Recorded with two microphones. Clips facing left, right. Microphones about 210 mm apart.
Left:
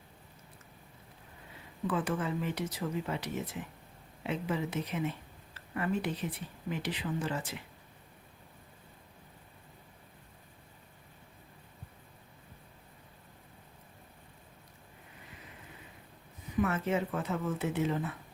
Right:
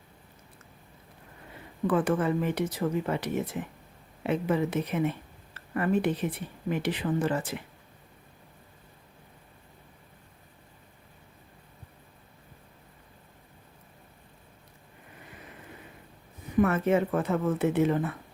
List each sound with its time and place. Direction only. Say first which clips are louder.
1.9 s speech: right 7 dB; 55° right (ahead or behind)
16.6 s speech: right 7 dB; 55° right (ahead or behind)